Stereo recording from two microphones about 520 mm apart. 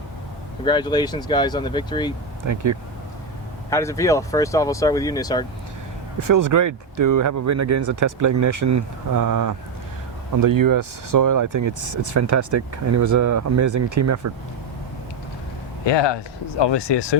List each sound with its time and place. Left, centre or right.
0.6 s speech: centre
2.4 s speech: right
3.7 s speech: centre
6.1 s speech: right
15.9 s speech: left